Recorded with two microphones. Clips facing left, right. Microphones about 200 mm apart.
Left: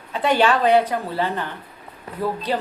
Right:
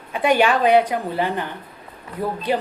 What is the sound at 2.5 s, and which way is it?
Speech, 15° right (ahead or behind).